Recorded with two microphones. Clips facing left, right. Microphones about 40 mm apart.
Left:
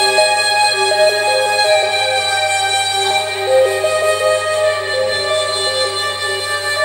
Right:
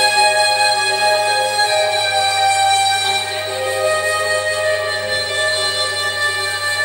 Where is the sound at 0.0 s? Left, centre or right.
Left.